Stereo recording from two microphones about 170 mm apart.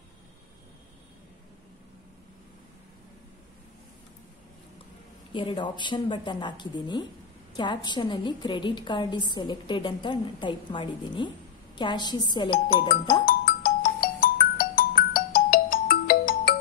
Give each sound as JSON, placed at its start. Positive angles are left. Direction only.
{"t": 5.3, "sound": "a woman's voice", "side_deg": 30}
{"t": 12.6, "sound": "speech", "side_deg": 60}
{"t": 13.2, "sound": "music", "side_deg": 60}
{"t": 14.0, "sound": "ringtone", "side_deg": 60}